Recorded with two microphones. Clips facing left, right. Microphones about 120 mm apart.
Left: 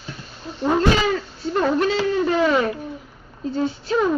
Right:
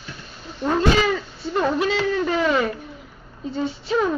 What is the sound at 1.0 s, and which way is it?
Speech, centre (ahead or behind).